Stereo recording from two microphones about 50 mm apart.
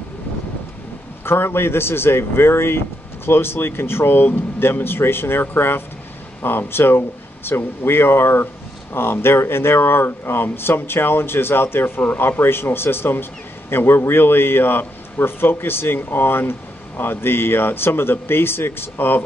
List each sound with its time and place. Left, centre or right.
1.2 s a man's voice: left